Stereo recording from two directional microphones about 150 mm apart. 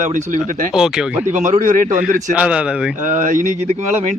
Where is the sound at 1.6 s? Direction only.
60° right (ahead or behind).